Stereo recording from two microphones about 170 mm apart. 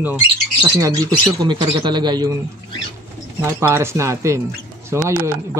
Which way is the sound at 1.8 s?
25° right (ahead or behind).